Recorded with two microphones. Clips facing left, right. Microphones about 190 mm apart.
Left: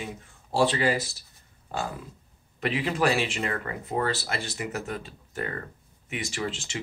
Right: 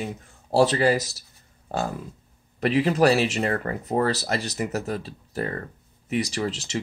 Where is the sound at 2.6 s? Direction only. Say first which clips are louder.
Right 6 dB; 40° right (ahead or behind).